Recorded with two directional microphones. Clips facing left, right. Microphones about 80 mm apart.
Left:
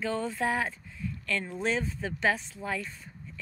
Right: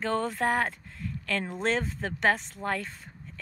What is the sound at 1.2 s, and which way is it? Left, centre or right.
Speech, right.